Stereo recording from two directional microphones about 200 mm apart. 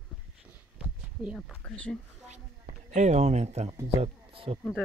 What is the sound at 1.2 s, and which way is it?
Speech, 5° right (ahead or behind).